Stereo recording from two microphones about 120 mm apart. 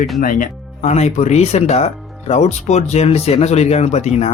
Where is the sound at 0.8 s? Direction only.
65° left (ahead or behind).